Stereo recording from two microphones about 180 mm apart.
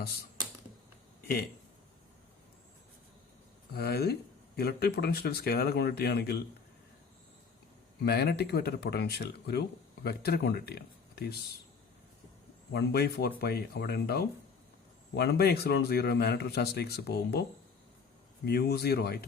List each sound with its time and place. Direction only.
3.7 s speech: 60° left (ahead or behind)
8.0 s speech: 60° left (ahead or behind)
12.7 s speech: 60° left (ahead or behind)
18.4 s speech: 65° left (ahead or behind)